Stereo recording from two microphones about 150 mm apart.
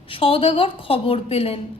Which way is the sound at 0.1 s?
40° left (ahead or behind).